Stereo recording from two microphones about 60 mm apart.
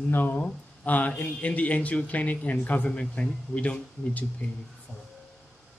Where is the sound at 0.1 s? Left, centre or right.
Left.